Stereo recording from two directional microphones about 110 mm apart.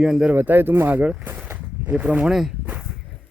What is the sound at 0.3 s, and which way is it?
Speech, 20° right (ahead or behind).